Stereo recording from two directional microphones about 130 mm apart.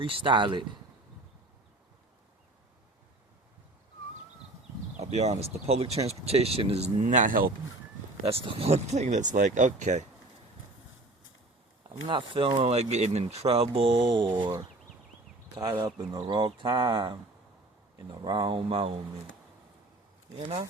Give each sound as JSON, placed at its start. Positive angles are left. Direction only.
{"t": 0.0, "sound": "speech", "side_deg": -40}
{"t": 4.9, "sound": "speech", "side_deg": -60}
{"t": 8.3, "sound": "speech", "side_deg": -50}
{"t": 12.0, "sound": "speech", "side_deg": -45}
{"t": 15.5, "sound": "speech", "side_deg": -30}